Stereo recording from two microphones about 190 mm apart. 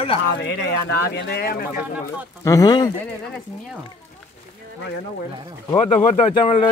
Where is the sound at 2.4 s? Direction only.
20° left (ahead or behind).